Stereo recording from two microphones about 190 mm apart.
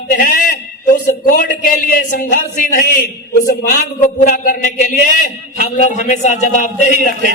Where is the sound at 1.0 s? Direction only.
45° left (ahead or behind).